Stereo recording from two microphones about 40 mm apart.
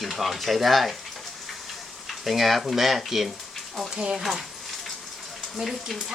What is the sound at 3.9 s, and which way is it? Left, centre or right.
Speech, centre.